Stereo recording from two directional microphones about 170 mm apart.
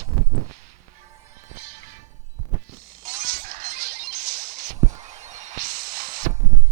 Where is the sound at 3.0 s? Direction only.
55° right (ahead or behind).